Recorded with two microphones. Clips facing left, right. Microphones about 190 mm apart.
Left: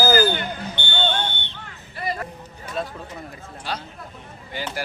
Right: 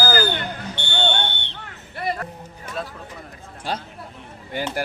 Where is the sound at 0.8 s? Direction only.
80° right.